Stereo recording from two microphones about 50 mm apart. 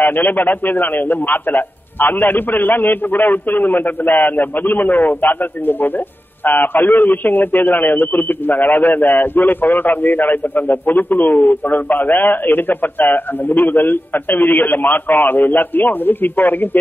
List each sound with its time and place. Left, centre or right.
0.0 s a man's voice: left